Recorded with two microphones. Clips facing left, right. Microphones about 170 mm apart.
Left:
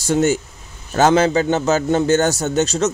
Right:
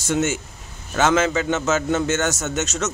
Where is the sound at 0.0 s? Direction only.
35° left (ahead or behind).